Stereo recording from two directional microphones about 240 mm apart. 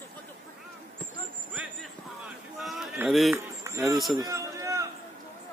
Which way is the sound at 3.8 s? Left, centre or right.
Centre.